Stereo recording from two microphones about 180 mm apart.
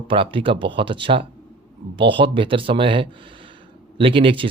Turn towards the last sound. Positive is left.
turn(degrees=-30)  # may be behind; listen again after turning